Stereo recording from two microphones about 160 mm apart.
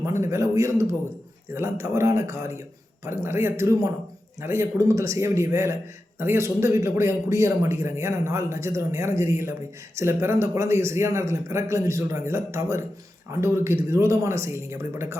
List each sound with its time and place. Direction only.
0.0 s a man's voice: 15° right (ahead or behind)